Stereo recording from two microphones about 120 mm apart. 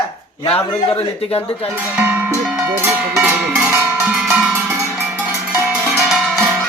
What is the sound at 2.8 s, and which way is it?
Cowbell, 20° right (ahead or behind).